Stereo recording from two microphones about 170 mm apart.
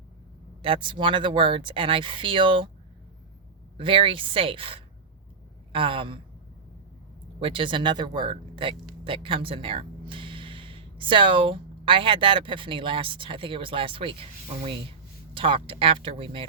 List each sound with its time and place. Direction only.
0.6 s speech: 30° right (ahead or behind)
3.8 s speech: 30° right (ahead or behind)
7.3 s speech: 30° right (ahead or behind)